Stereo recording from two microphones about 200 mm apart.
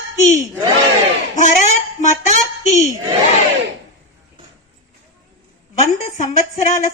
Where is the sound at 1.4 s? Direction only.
40° left (ahead or behind).